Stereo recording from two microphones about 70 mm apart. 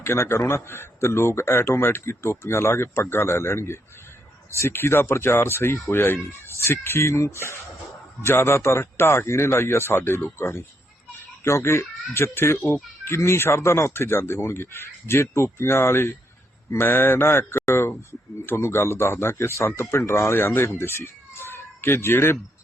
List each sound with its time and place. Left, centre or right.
0.0 s a child's voice: left